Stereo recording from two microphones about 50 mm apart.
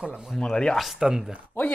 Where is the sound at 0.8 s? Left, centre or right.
Centre.